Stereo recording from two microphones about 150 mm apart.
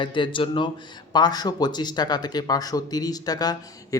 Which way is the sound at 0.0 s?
35° left (ahead or behind).